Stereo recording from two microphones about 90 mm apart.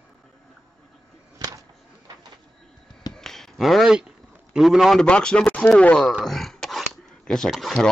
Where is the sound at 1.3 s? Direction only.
45° right (ahead or behind).